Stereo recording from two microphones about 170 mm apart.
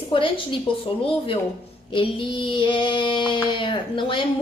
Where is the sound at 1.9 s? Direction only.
30° left (ahead or behind).